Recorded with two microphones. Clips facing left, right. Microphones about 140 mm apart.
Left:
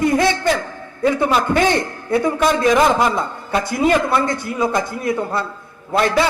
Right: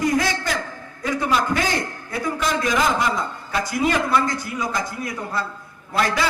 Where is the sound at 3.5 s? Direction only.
25° left (ahead or behind).